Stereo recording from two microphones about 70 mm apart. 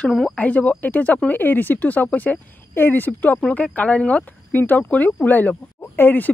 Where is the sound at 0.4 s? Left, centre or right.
Left.